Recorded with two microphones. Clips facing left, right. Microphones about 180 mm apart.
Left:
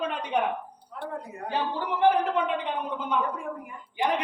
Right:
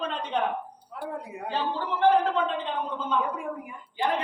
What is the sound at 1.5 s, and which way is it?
A woman's voice, 15° left (ahead or behind).